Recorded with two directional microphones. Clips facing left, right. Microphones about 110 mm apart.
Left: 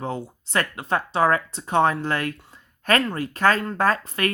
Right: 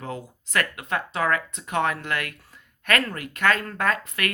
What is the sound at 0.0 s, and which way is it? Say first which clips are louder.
Speech: left 5 dB; 30° left (ahead or behind).